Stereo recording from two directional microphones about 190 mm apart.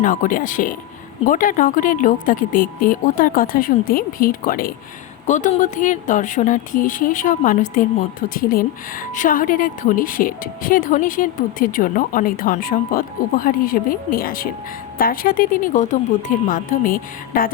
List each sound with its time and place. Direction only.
0.0 s a woman's voice: 45° left (ahead or behind)